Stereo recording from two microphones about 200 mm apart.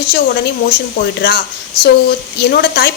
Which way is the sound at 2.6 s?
55° left (ahead or behind).